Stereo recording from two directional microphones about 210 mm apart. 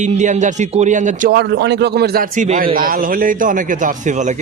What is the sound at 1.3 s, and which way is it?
A man's voice, 55° right (ahead or behind).